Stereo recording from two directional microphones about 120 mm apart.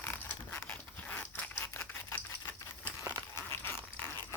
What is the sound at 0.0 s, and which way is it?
Crumpling, 15° left (ahead or behind).